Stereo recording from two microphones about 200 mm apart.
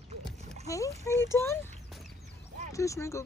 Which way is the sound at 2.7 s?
15° left (ahead or behind).